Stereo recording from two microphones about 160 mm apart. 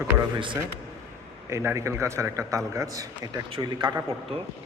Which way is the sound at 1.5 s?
15° right (ahead or behind).